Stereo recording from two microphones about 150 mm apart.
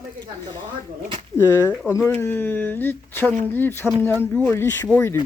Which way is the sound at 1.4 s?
15° left (ahead or behind).